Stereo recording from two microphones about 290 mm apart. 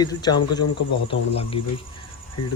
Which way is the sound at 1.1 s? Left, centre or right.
Centre.